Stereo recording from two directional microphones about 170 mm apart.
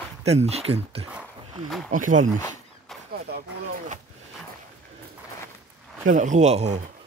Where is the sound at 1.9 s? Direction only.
50° right (ahead or behind).